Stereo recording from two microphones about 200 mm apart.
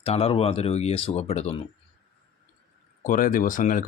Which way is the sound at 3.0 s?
45° left (ahead or behind).